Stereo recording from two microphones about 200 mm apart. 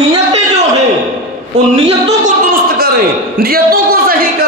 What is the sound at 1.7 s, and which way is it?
Speech, 30° right (ahead or behind).